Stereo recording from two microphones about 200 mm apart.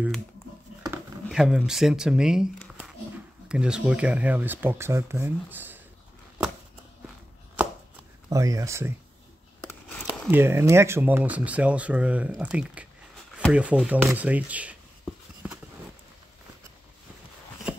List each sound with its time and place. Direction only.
1.3 s speech: 5° right (ahead or behind)
7.6 s chopping: 10° right (ahead or behind)
8.3 s speech: 15° right (ahead or behind)
9.7 s a sound: 10° left (ahead or behind)
10.3 s speech: 10° right (ahead or behind)